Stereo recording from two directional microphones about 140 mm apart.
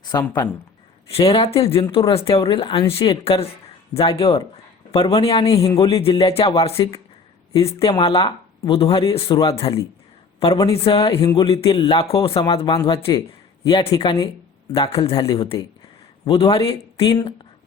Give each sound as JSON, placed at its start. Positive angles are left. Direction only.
{"t": 0.0, "sound": "speech", "side_deg": 30}
{"t": 1.3, "sound": "a man's voice", "side_deg": 40}
{"t": 5.6, "sound": "speech", "side_deg": 25}
{"t": 5.9, "sound": "a man's voice", "side_deg": 40}